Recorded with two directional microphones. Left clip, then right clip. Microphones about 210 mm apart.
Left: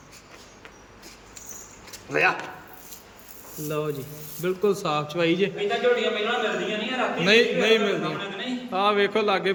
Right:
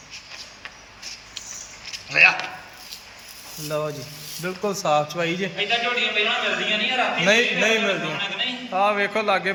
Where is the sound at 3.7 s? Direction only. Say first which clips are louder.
Right 2 dB; 5° left (ahead or behind).